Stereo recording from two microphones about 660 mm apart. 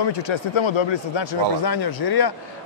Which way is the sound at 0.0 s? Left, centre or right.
Left.